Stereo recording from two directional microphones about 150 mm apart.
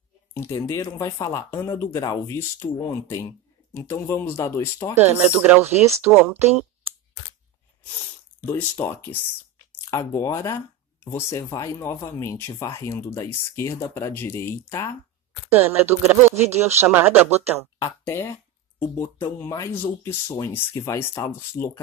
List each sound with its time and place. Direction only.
0.3 s speech: 20° left (ahead or behind)
5.0 s speech: 10° right (ahead or behind)
8.4 s speech: 15° left (ahead or behind)
15.5 s speech: 10° right (ahead or behind)
18.0 s speech: 15° left (ahead or behind)